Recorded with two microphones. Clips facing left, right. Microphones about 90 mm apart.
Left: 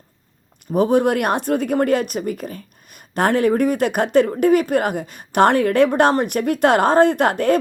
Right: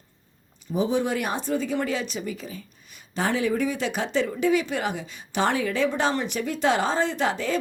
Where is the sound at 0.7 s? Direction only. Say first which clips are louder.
Left 8 dB; 60° left (ahead or behind).